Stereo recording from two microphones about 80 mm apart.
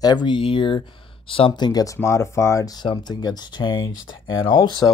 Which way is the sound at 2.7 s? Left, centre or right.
Left.